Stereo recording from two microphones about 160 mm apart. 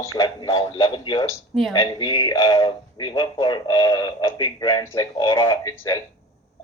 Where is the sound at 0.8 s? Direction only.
30° left (ahead or behind).